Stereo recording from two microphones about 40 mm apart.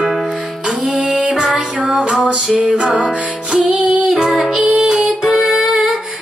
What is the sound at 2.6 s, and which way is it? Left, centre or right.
Music, right.